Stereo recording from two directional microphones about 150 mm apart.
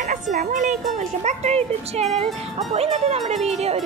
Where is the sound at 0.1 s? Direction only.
60° right (ahead or behind).